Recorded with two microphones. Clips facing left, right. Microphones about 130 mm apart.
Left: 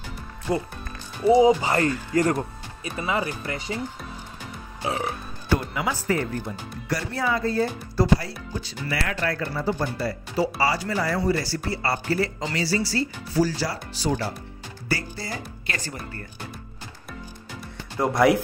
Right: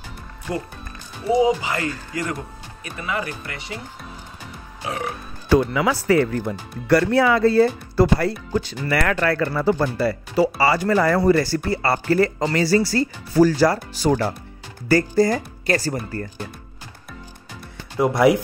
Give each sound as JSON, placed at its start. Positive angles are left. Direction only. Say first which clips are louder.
{"t": 1.3, "sound": "speech", "louder": "left 1 dB", "side_deg": 30}
{"t": 2.8, "sound": "speech", "louder": "left 1 dB", "side_deg": 25}
{"t": 4.8, "sound": "speech", "louder": "even", "side_deg": 30}
{"t": 5.5, "sound": "speech", "louder": "right 7 dB", "side_deg": -90}
{"t": 6.9, "sound": "speech", "louder": "right 10 dB", "side_deg": -70}
{"t": 17.9, "sound": "speech", "louder": "right 3 dB", "side_deg": -5}